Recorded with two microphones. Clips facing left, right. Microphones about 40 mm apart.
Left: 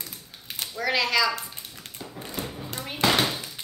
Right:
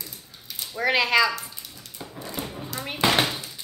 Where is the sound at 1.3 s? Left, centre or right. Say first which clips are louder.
Even; left.